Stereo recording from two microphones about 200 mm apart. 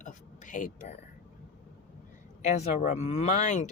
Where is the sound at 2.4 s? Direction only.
35° left (ahead or behind).